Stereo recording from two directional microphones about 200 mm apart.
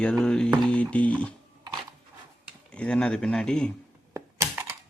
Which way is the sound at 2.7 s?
5° left (ahead or behind).